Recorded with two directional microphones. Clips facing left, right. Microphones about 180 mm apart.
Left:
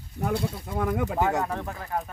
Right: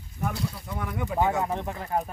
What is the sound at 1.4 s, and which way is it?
Speech, 20° right (ahead or behind).